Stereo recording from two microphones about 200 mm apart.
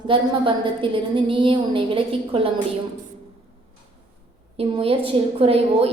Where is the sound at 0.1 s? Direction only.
25° right (ahead or behind).